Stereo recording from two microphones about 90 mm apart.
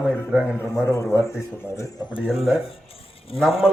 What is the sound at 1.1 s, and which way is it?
Speech, 30° left (ahead or behind).